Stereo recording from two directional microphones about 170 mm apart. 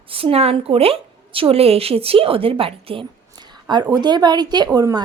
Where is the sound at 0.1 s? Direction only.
35° right (ahead or behind).